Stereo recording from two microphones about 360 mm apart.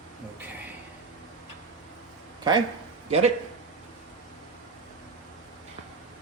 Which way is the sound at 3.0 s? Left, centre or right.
Centre.